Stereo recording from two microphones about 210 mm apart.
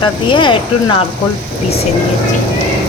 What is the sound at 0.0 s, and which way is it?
Speech, 20° left (ahead or behind).